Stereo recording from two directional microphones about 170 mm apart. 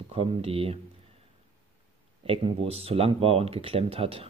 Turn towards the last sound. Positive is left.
turn(degrees=-35)  # may be behind; listen again after turning